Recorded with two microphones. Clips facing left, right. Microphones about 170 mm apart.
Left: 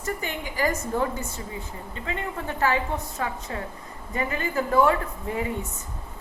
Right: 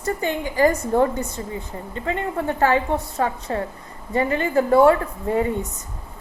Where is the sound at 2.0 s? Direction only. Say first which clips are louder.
Right 7 dB; 45° right (ahead or behind).